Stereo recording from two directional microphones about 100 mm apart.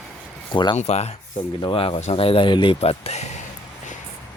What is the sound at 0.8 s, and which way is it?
Speech, 90° left.